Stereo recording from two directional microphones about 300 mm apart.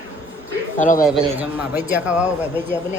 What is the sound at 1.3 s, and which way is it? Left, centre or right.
Speech, centre.